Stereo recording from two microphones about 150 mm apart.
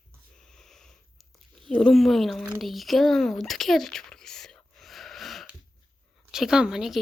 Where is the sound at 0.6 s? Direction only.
5° left (ahead or behind).